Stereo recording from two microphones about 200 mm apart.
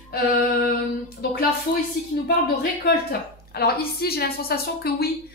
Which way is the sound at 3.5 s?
50° left (ahead or behind).